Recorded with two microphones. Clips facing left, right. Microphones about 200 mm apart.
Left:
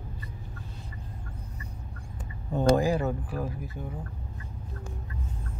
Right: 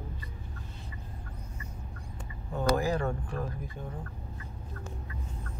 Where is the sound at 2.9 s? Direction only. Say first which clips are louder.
Left 3 dB; 5° left (ahead or behind).